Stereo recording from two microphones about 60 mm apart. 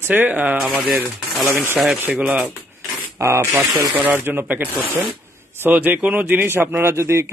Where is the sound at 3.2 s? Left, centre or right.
Right.